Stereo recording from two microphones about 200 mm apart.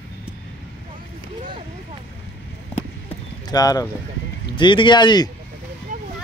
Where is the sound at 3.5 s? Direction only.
20° left (ahead or behind).